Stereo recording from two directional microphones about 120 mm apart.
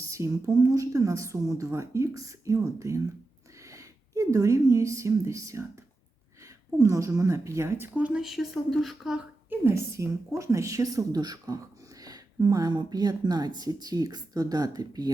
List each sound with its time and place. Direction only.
0.1 s speech: 25° right (ahead or behind); by 9.2 s centre (ahead or behind)
9.5 s a woman's voice: 20° right (ahead or behind)